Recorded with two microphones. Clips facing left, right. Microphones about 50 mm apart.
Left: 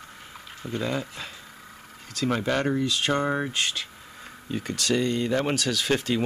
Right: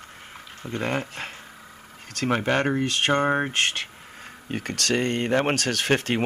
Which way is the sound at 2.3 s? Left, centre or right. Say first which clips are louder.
Right 2 dB; right.